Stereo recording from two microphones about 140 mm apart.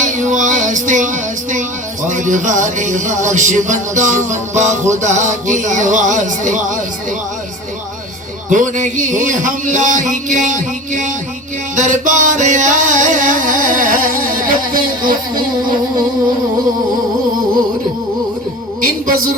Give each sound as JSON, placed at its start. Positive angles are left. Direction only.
{"t": 0.0, "sound": "music", "side_deg": -60}
{"t": 8.4, "sound": "music", "side_deg": -65}